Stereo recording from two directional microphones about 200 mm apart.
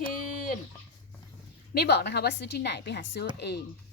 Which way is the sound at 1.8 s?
55° left (ahead or behind).